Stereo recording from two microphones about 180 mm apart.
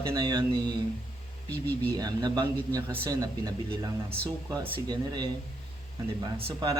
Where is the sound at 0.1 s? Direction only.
25° right (ahead or behind).